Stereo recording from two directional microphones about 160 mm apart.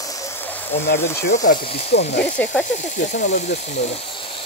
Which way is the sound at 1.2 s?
50° left (ahead or behind).